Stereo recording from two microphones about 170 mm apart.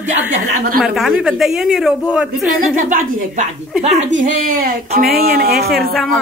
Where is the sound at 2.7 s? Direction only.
50° right (ahead or behind); by 5.7 s 65° right (ahead or behind).